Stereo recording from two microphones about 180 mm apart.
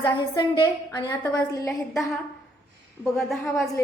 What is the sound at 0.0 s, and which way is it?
A woman's voice, 25° left (ahead or behind).